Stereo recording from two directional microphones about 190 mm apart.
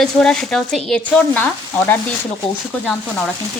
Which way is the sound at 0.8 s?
5° left (ahead or behind).